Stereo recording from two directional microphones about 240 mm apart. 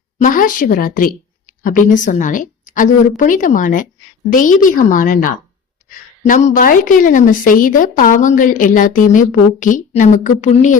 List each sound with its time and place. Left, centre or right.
0.2 s speech: left